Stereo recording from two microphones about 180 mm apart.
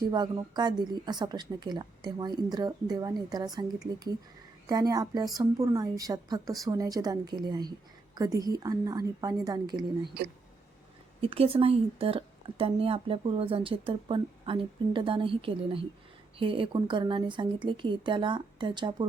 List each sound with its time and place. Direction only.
0.1 s a woman's voice: 25° right (ahead or behind)
11.2 s a woman's voice: 30° right (ahead or behind)